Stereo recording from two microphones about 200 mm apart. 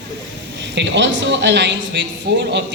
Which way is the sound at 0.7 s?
60° right (ahead or behind).